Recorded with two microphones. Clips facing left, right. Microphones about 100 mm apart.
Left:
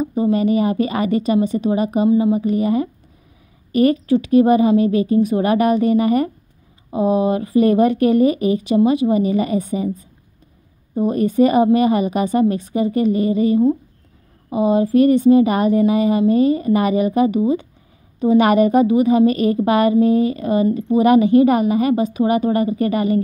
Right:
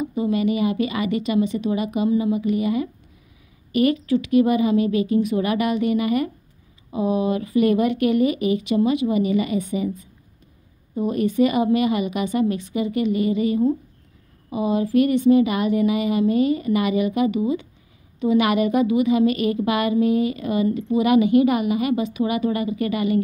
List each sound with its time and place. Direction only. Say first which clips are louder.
0.0 s speech: left 4 dB; 35° left (ahead or behind)